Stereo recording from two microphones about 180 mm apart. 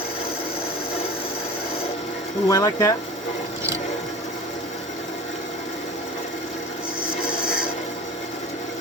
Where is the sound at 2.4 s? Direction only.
20° left (ahead or behind).